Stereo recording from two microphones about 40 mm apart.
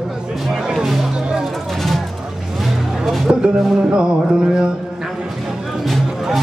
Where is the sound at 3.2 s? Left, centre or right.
Centre.